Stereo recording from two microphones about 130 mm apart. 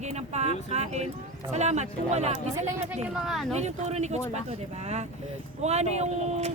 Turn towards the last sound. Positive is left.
turn(degrees=-60)  # may be behind; listen again after turning